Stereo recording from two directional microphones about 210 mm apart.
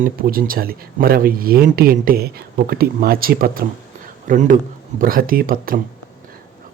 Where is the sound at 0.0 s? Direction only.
45° right (ahead or behind).